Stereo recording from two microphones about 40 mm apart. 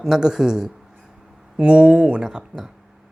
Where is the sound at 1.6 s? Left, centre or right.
Right.